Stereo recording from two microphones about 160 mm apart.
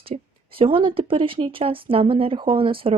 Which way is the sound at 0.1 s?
45° right (ahead or behind).